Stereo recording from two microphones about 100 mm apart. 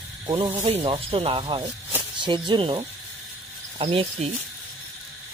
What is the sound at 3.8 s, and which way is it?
Speech, 70° right (ahead or behind).